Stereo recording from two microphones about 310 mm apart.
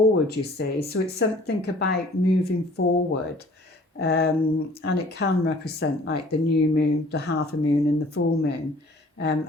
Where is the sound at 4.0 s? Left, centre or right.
Left.